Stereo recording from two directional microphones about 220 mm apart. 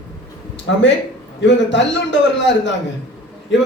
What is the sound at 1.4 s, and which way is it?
A man's voice, 55° left (ahead or behind).